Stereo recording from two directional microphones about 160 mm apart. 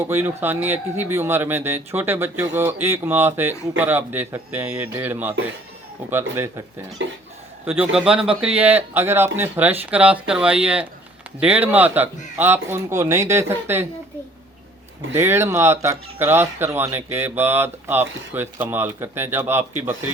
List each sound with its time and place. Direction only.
0.0 s speech: 15° right (ahead or behind)
15.1 s speech: 15° right (ahead or behind)